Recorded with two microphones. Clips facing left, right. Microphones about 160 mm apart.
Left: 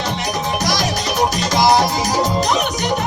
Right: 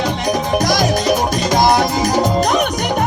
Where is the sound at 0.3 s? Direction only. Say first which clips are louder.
Right 6 dB; 50° right (ahead or behind).